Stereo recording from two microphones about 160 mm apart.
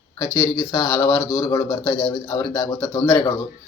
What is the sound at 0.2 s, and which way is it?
Speech, 20° left (ahead or behind).